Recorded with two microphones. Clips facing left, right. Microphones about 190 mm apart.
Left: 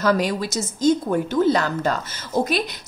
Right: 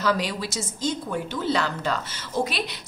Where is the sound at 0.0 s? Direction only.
45° left (ahead or behind).